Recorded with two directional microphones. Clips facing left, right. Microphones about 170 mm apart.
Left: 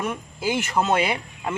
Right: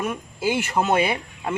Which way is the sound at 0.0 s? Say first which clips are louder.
Right 2 dB; 10° right (ahead or behind).